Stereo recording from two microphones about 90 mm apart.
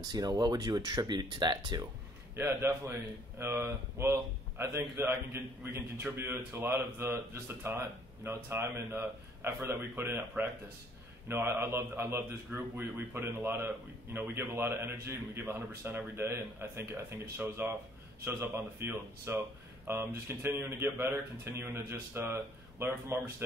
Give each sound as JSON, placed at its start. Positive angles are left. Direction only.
{"t": 0.0, "sound": "speech", "side_deg": -50}
{"t": 2.3, "sound": "a man's voice", "side_deg": -30}